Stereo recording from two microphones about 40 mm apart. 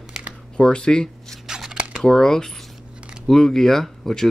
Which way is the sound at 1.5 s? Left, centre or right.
Centre.